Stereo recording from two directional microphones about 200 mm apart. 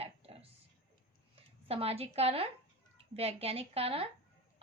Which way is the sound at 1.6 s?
30° right (ahead or behind).